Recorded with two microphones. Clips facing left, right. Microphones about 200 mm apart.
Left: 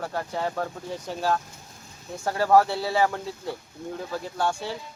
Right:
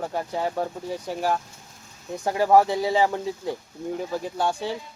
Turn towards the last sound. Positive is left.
turn(degrees=-15)  # may be behind; listen again after turning